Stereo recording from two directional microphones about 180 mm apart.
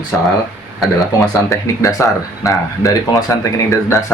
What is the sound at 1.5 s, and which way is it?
Speech, 15° left (ahead or behind).